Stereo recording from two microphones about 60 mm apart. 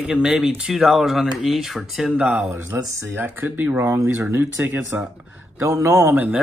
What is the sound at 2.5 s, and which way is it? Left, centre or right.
Speech, right.